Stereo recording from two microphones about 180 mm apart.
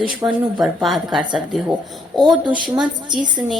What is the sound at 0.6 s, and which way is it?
A woman's voice, centre (ahead or behind).